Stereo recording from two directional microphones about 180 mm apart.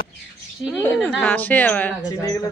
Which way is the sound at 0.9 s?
5° left (ahead or behind).